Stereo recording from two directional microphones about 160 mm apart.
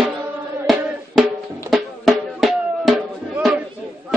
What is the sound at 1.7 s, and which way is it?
Music, centre (ahead or behind).